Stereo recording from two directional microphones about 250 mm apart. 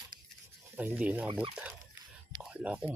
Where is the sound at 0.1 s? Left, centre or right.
Right.